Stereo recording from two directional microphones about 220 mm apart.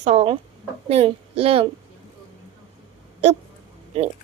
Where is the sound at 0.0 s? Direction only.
25° right (ahead or behind).